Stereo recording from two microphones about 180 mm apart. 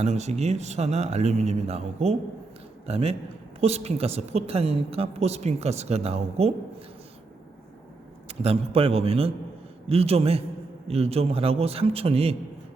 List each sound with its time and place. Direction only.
0.0 s a woman's voice: 35° right (ahead or behind)
8.3 s a woman's voice: 35° right (ahead or behind)